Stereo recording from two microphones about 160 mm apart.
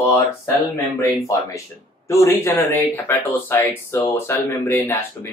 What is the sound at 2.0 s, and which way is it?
Speech, 20° left (ahead or behind).